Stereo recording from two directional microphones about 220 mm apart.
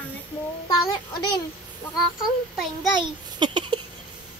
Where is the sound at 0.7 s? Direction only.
20° left (ahead or behind).